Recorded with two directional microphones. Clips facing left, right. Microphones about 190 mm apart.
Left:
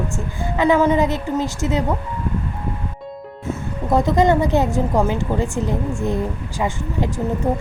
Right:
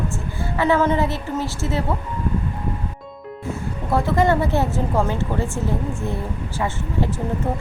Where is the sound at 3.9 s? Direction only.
20° left (ahead or behind).